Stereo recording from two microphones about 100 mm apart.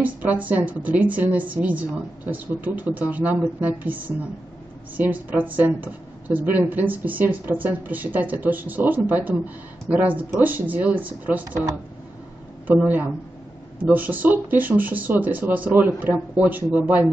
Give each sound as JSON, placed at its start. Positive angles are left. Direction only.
{"t": 0.0, "sound": "a woman's voice", "side_deg": -15}
{"t": 12.6, "sound": "a woman's voice", "side_deg": -15}